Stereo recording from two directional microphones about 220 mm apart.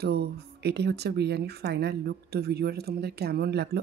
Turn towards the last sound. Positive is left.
turn(degrees=-50)  # may be behind; listen again after turning